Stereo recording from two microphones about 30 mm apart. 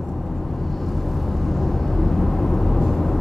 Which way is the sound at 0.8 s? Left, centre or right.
Centre.